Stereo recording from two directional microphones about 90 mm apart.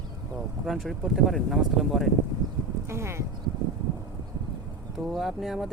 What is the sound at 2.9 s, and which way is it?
Speech, 30° right (ahead or behind).